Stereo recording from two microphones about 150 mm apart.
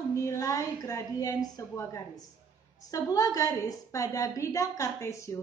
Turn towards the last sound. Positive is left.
turn(degrees=20)  # may be behind; listen again after turning